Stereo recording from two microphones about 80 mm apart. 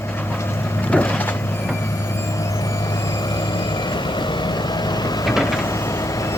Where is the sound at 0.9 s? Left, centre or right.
Left.